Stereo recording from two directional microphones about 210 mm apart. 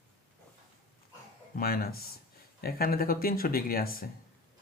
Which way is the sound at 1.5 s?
45° left (ahead or behind).